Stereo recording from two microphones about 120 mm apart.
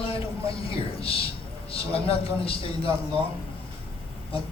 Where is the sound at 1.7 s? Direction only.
55° left (ahead or behind).